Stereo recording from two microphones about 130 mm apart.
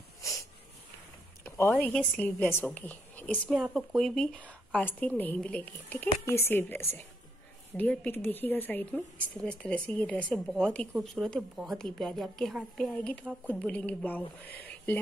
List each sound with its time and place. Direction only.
0.2 s snort: 25° left (ahead or behind)
1.4 s a sound: 15° left (ahead or behind)
1.9 s a woman's voice: 10° left (ahead or behind)
3.4 s a woman's voice: 10° right (ahead or behind); by 10.4 s 10° left (ahead or behind)
10.4 s a woman's voice: centre (ahead or behind)